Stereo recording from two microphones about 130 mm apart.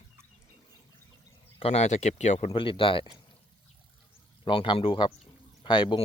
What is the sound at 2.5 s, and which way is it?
Speech, 40° left (ahead or behind).